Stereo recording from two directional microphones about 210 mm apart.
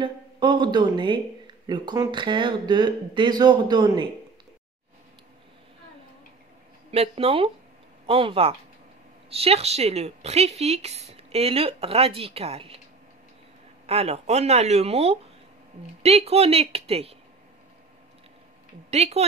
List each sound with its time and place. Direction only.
0.0 s speech: 20° right (ahead or behind)
6.9 s speech: 30° right (ahead or behind)
13.8 s speech: 30° right (ahead or behind)
18.9 s speech: 30° right (ahead or behind)